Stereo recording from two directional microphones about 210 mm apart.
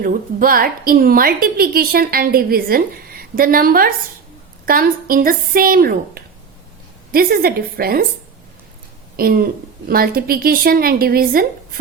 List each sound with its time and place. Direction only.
0.0 s a woman's voice: 40° right (ahead or behind)
9.1 s a woman's voice: 45° right (ahead or behind)